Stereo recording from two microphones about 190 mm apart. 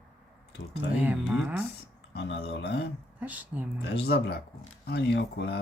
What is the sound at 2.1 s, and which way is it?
Speech, 60° left (ahead or behind).